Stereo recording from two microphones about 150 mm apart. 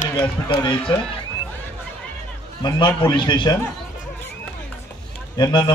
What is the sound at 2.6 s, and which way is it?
Speech, 30° left (ahead or behind).